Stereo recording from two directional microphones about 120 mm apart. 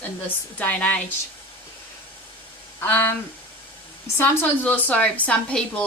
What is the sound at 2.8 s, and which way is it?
Speech, 15° left (ahead or behind).